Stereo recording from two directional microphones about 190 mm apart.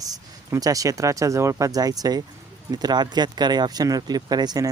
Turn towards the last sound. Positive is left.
turn(degrees=-20)  # may be behind; listen again after turning